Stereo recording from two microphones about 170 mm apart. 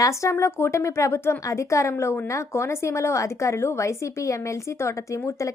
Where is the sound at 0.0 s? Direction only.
15° left (ahead or behind).